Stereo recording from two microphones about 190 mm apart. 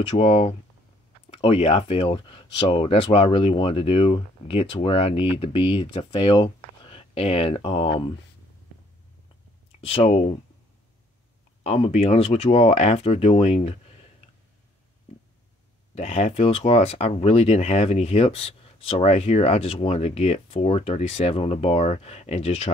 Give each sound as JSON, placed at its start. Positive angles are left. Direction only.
{"t": 0.2, "sound": "speech", "side_deg": 30}
{"t": 9.8, "sound": "speech", "side_deg": 30}
{"t": 11.6, "sound": "speech", "side_deg": 35}
{"t": 15.9, "sound": "speech", "side_deg": 30}